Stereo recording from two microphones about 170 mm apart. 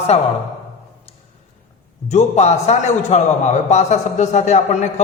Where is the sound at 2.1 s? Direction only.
40° left (ahead or behind).